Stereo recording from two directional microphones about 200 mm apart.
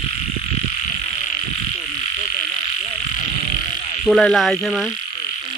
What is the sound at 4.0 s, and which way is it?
Insect, centre (ahead or behind).